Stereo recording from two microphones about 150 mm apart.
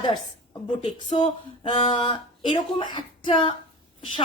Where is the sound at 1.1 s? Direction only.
40° left (ahead or behind).